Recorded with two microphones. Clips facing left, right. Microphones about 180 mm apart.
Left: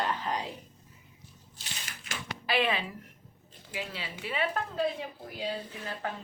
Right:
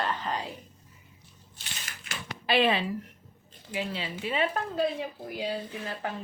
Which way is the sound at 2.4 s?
30° right (ahead or behind).